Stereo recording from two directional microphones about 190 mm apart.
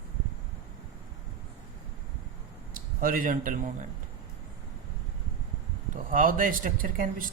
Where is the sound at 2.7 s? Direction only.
50° right (ahead or behind).